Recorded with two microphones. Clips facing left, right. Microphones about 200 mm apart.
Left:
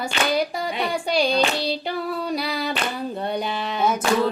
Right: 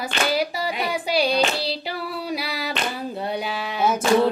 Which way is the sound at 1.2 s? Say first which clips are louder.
Even; 5° right (ahead or behind).